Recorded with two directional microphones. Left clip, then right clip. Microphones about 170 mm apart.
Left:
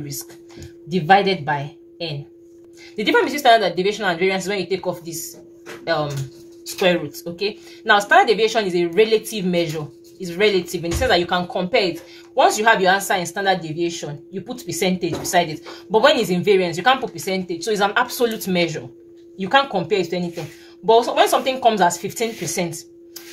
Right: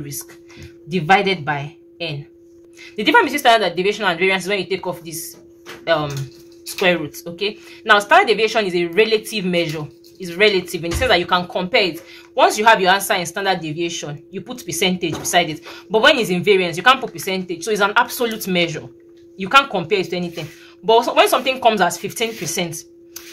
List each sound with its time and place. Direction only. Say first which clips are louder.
0.9 s speech: even; 20° right (ahead or behind)